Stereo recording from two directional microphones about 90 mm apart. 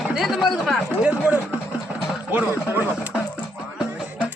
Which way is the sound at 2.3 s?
15° right (ahead or behind).